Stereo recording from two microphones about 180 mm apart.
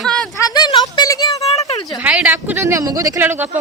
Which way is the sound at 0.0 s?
5° left (ahead or behind).